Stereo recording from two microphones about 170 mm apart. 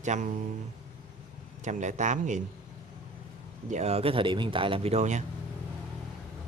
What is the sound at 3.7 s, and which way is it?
Speech, 35° right (ahead or behind).